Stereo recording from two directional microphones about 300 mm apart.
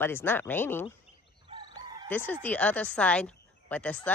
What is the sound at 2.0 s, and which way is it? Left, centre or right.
Speech, centre.